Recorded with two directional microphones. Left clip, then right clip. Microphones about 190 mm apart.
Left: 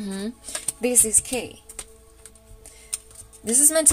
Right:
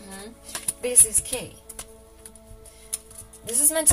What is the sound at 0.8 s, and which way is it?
Speech, 60° left (ahead or behind).